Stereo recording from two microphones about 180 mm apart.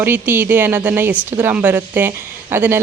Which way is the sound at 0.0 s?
10° right (ahead or behind).